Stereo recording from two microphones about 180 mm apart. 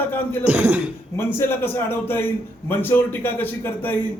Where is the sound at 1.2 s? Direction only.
15° left (ahead or behind).